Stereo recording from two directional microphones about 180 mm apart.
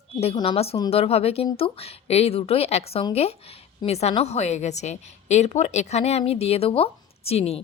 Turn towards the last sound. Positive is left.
turn(degrees=35)  # may be behind; listen again after turning